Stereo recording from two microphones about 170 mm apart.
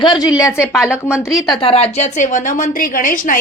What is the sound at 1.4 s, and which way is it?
Speech, centre (ahead or behind).